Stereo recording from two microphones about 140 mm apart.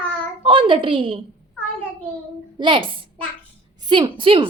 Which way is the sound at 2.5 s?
35° right (ahead or behind).